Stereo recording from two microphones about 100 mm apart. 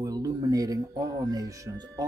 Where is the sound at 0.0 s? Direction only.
40° right (ahead or behind).